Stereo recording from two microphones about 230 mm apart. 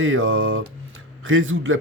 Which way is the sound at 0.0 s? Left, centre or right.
Right.